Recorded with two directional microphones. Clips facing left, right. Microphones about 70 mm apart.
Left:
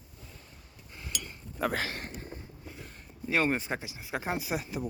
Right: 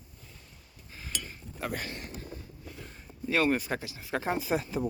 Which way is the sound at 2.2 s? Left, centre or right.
Left.